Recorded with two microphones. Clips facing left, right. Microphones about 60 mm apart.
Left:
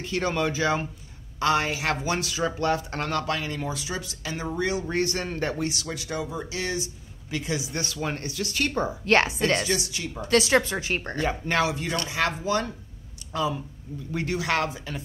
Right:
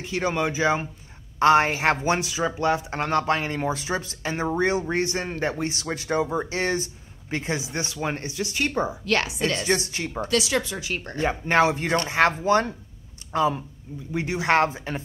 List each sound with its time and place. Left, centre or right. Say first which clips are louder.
0.0 s speech: right 1 dB; centre
1.4 s speech: right 6 dB; right
9.0 s speech: left 3 dB; left
9.7 s speech: right 4 dB; right
10.3 s speech: left 4 dB; left
11.1 s speech: right 6 dB; right
14.1 s speech: right 5 dB; right